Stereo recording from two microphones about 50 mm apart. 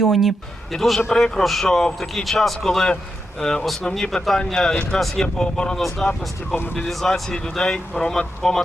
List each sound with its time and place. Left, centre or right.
0.0 s speech: centre
0.7 s speech: centre
5.2 s speech: centre